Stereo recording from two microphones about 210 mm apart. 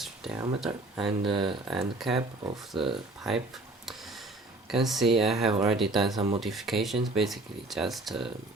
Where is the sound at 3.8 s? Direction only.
Centre (ahead or behind).